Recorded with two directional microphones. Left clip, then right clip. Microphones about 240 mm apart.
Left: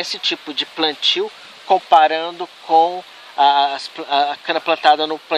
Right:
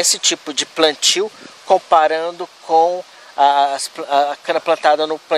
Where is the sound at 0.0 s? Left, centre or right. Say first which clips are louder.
Right 4 dB; right.